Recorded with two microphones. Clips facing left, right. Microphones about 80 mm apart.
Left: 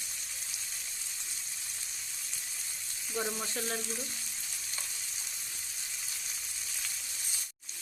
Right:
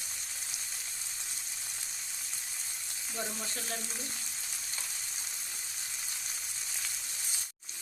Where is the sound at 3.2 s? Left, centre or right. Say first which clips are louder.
Left 4 dB; left.